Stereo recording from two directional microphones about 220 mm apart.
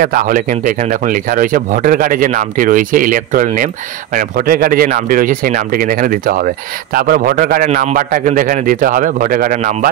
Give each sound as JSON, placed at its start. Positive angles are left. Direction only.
{"t": 0.0, "sound": "speech", "side_deg": -40}